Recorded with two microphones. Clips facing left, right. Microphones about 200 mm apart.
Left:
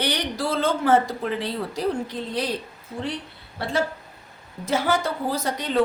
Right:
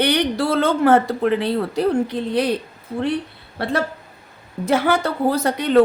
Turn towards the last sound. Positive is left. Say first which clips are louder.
# right 7 dB
turn(degrees=-60)  # may be behind; listen again after turning